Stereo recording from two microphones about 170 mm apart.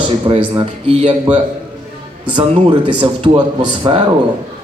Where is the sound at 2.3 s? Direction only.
30° right (ahead or behind).